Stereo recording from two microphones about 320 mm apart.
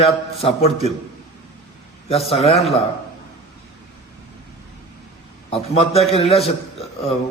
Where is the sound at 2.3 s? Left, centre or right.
Centre.